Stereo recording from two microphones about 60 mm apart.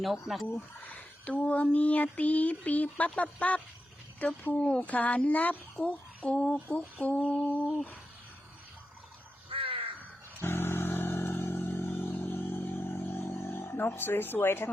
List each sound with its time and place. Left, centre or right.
0.0 s speech: centre
0.4 s speech: left
4.8 s speech: left
10.4 s vehicle: left